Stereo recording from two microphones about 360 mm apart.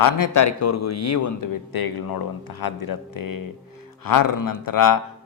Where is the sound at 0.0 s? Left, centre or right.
Left.